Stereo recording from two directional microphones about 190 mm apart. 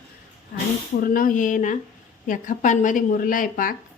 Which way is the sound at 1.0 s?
50° left (ahead or behind).